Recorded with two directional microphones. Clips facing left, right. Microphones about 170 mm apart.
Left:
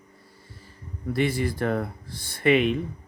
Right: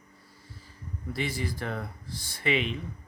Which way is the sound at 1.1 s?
60° left (ahead or behind).